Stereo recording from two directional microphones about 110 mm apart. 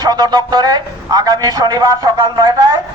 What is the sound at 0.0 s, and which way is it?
A man's voice, 40° right (ahead or behind).